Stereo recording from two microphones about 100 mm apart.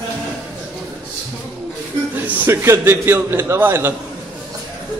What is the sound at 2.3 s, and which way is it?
A man's voice, 25° right (ahead or behind).